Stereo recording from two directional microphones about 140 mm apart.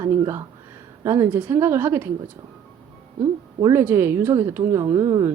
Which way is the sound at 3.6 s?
20° right (ahead or behind).